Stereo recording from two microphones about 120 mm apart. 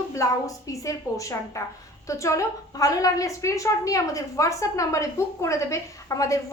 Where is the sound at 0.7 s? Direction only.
25° left (ahead or behind).